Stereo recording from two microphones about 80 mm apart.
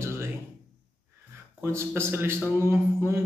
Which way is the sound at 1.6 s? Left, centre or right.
Right.